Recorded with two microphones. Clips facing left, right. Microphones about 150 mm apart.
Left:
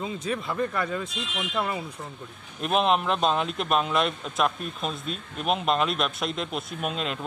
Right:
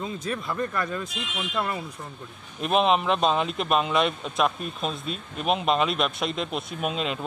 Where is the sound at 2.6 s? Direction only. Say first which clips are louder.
Right 1 dB; centre (ahead or behind).